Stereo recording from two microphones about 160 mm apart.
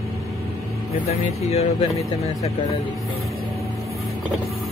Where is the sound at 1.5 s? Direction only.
40° left (ahead or behind).